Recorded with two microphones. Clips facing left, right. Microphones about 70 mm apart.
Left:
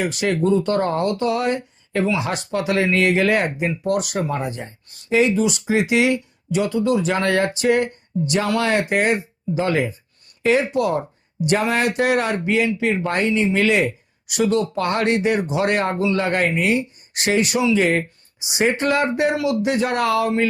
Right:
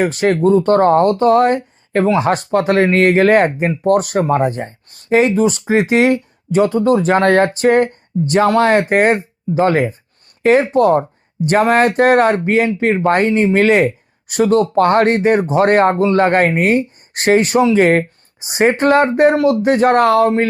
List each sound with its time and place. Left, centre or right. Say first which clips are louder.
0.0 s speech: right 7 dB; right